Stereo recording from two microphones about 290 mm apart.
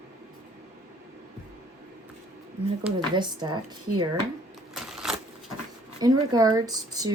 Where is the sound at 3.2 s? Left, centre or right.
Centre.